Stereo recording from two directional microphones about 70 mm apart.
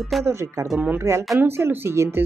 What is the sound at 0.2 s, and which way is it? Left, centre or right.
Speech, right.